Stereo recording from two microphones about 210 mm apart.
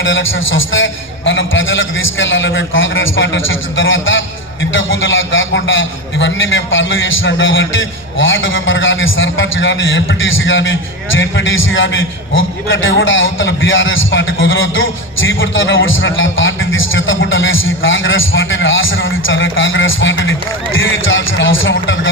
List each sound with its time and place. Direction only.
0.0 s a man's voice: 65° left (ahead or behind)